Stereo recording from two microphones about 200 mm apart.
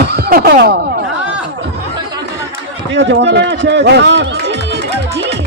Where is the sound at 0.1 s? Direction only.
50° right (ahead or behind).